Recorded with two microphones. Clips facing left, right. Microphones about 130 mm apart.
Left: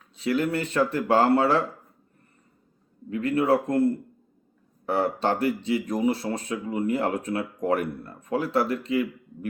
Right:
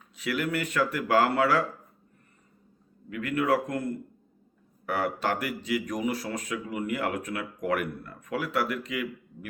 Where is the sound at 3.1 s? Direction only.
30° left (ahead or behind).